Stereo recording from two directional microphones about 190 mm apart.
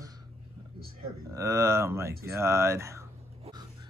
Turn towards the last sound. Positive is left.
turn(degrees=-15)  # may be behind; listen again after turning